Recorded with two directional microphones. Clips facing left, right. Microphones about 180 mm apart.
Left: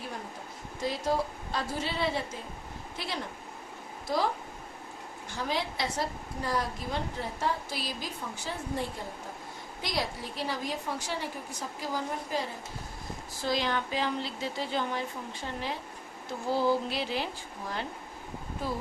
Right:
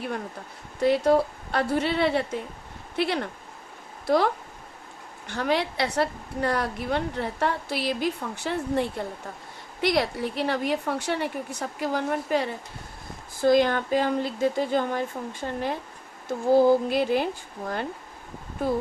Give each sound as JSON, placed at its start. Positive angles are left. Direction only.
{"t": 0.8, "sound": "a woman's voice", "side_deg": -65}
{"t": 5.3, "sound": "a woman's voice", "side_deg": -65}
{"t": 13.4, "sound": "speech", "side_deg": -50}